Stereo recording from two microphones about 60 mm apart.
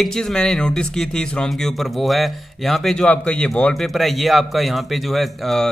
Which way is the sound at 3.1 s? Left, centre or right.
Centre.